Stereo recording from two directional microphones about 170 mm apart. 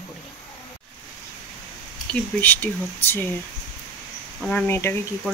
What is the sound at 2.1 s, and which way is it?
Speech, 10° left (ahead or behind).